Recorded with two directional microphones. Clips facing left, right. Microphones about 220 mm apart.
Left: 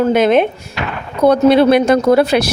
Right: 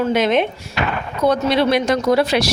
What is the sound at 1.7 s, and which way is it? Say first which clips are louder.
Speech: left 6 dB; 55° left (ahead or behind).